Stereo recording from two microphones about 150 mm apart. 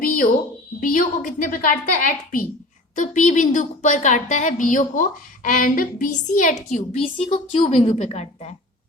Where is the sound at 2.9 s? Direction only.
55° left (ahead or behind).